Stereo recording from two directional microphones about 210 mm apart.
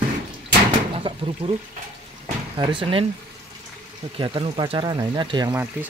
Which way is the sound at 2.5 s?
25° right (ahead or behind).